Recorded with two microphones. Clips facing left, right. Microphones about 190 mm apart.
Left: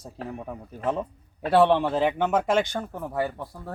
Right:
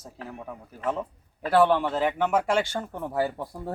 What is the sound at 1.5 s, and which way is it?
Speech, 25° left (ahead or behind).